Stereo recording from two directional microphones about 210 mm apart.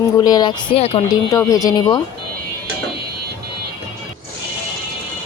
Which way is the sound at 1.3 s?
15° left (ahead or behind).